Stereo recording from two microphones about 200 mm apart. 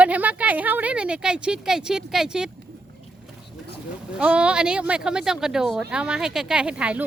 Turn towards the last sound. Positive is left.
turn(degrees=-5)  # may be behind; listen again after turning